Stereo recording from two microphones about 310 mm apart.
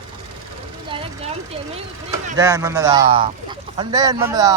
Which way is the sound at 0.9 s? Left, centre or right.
Centre.